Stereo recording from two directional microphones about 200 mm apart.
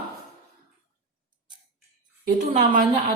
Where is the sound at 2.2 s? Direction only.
40° right (ahead or behind).